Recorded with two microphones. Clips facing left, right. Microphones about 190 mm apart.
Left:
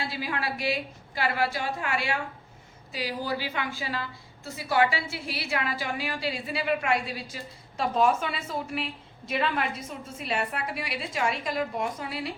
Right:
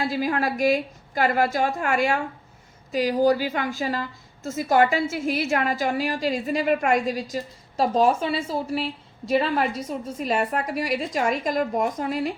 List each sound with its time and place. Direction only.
0.0 s a woman's voice: 45° right (ahead or behind)